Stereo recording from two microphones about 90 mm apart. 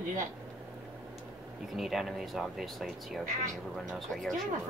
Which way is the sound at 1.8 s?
Centre (ahead or behind).